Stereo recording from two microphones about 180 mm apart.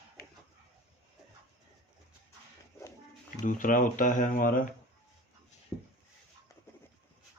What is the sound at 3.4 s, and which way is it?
Speech, 45° left (ahead or behind).